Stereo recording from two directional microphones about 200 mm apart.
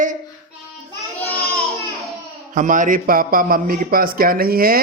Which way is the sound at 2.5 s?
40° right (ahead or behind).